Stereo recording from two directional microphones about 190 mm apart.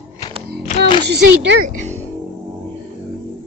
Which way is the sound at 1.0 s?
65° right (ahead or behind).